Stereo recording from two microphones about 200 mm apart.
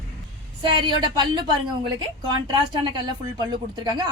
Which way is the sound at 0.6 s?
25° right (ahead or behind).